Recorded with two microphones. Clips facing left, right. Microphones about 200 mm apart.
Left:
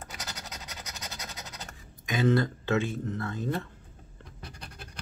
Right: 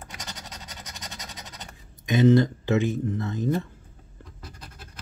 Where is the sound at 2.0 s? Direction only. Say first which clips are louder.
Right 7 dB; 20° right (ahead or behind).